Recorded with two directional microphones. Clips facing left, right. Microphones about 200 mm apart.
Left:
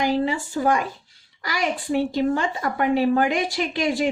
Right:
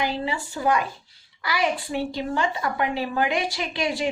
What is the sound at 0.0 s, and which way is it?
A woman's voice, 45° left (ahead or behind).